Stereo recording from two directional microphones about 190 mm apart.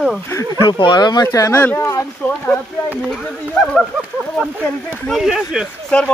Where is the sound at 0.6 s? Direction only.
25° left (ahead or behind).